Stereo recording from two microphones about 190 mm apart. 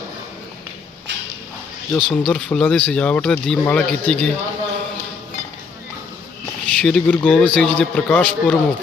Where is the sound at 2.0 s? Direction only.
5° left (ahead or behind).